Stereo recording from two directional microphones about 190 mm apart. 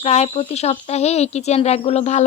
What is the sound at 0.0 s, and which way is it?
Speech, 30° left (ahead or behind).